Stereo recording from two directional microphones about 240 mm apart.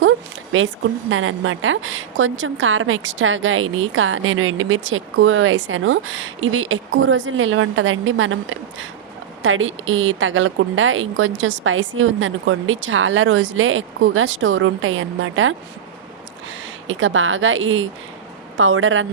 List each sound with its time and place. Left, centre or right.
0.5 s a woman's voice: right
16.8 s a woman's voice: right